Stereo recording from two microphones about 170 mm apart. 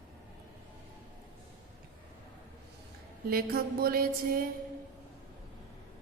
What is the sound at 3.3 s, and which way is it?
A woman's voice, 60° right (ahead or behind).